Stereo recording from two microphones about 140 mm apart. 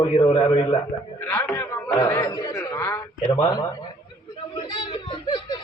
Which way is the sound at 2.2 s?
35° left (ahead or behind).